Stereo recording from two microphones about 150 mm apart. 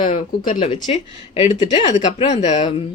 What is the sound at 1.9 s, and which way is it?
Speech, 50° left (ahead or behind).